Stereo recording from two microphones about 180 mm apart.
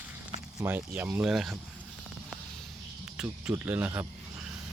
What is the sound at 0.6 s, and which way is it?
Speech, 10° right (ahead or behind).